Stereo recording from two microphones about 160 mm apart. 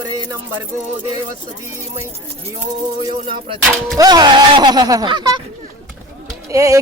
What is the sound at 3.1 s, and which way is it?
Speech, 35° right (ahead or behind).